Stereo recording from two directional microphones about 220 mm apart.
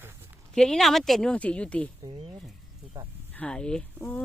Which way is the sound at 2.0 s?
25° right (ahead or behind).